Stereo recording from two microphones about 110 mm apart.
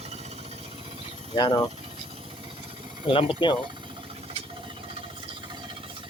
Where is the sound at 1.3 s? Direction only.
45° left (ahead or behind).